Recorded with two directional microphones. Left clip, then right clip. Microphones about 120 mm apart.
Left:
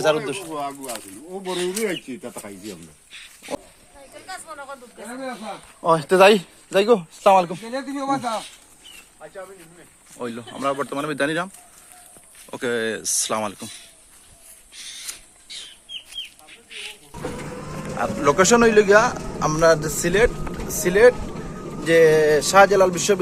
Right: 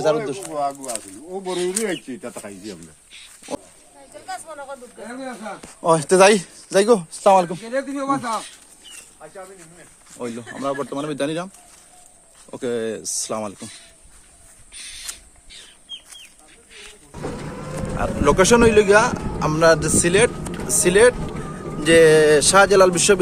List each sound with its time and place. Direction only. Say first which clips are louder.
0.0 s a man's voice: even; 25° right (ahead or behind)
1.5 s speech: right 1 dB; 15° left (ahead or behind)
4.1 s a sound: right 4 dB; 90° right
5.8 s speech: right 1 dB; 45° right (ahead or behind)
7.6 s speech: right 3 dB; 30° left (ahead or behind)
10.2 s a man's voice: even; 25° right (ahead or behind)
12.5 s a man's voice: left 1 dB; 20° right (ahead or behind)
17.9 s a man's voice: right 1 dB; 15° right (ahead or behind); by 23.1 s 50° right (ahead or behind)